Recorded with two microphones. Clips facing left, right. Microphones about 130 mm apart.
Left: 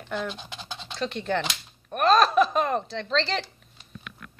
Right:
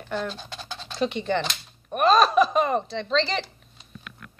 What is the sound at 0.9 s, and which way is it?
Speech, 5° right (ahead or behind).